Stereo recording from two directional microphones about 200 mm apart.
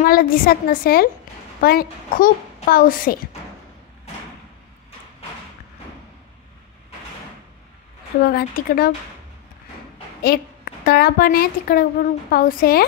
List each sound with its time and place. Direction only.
0.0 s a woman's voice: 45° left (ahead or behind)
8.2 s a woman's voice: 50° left (ahead or behind)
10.2 s a woman's voice: 50° left (ahead or behind)